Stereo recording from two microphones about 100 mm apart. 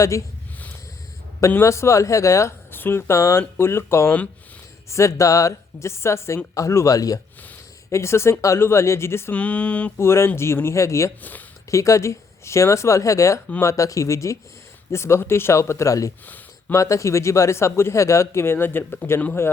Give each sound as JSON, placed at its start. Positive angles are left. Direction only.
{"t": 0.0, "sound": "a woman's voice", "side_deg": 30}
{"t": 1.4, "sound": "speech", "side_deg": 30}
{"t": 4.9, "sound": "a woman's voice", "side_deg": 30}
{"t": 9.3, "sound": "speech", "side_deg": 15}
{"t": 10.0, "sound": "speech", "side_deg": 25}
{"t": 11.2, "sound": "speech", "side_deg": 15}
{"t": 11.7, "sound": "a woman's voice", "side_deg": 30}
{"t": 16.2, "sound": "a sound", "side_deg": 15}
{"t": 16.7, "sound": "speech", "side_deg": 30}